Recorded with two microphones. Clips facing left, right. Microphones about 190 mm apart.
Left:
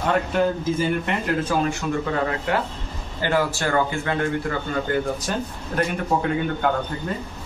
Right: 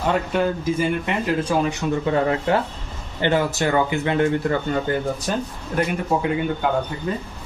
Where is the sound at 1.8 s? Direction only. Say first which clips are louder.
Right 2 dB; 20° right (ahead or behind).